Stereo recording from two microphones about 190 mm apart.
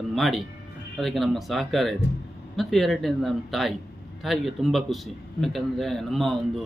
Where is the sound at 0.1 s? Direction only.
Centre (ahead or behind).